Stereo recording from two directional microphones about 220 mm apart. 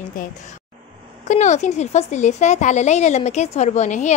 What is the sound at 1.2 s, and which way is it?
A woman's voice, 35° left (ahead or behind).